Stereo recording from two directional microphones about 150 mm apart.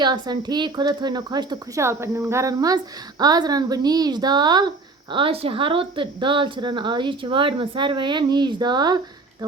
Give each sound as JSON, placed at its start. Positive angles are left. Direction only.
{"t": 0.0, "sound": "speech", "side_deg": -30}